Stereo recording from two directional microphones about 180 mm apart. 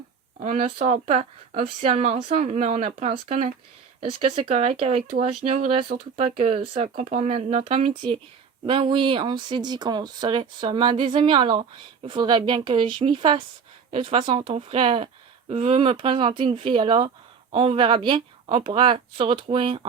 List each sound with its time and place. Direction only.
0.4 s speech: 40° right (ahead or behind)